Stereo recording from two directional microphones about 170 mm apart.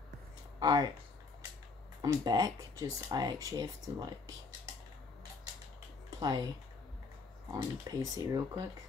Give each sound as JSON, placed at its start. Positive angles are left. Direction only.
{"t": 0.6, "sound": "speech", "side_deg": -25}
{"t": 2.0, "sound": "speech", "side_deg": -25}
{"t": 6.0, "sound": "speech", "side_deg": -20}
{"t": 7.5, "sound": "speech", "side_deg": -20}